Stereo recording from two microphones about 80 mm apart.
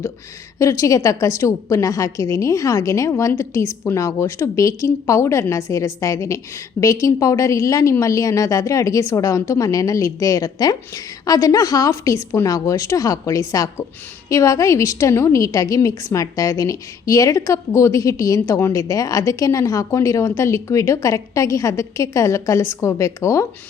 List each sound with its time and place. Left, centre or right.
0.6 s a woman's voice: left